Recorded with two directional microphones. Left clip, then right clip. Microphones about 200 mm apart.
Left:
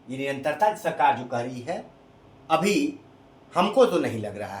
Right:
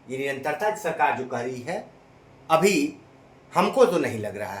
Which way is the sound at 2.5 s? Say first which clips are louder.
Right 2 dB; 20° right (ahead or behind).